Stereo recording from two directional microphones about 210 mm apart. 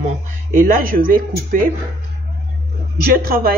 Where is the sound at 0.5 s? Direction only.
40° right (ahead or behind).